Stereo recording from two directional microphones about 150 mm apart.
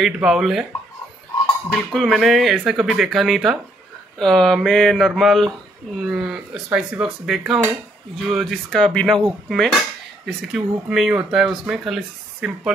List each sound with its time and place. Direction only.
0.0 s speech: 5° right (ahead or behind)
1.7 s speech: centre (ahead or behind)